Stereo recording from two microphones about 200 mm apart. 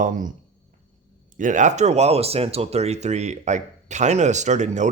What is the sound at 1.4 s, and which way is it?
Speech, 40° right (ahead or behind).